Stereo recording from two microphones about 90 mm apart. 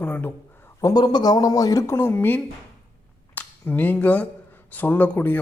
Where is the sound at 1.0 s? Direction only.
50° left (ahead or behind).